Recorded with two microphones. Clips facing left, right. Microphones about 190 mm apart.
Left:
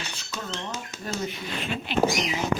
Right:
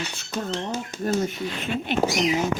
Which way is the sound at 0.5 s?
35° right (ahead or behind).